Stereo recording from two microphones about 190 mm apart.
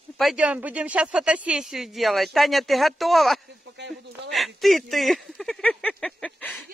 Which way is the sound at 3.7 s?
65° right (ahead or behind).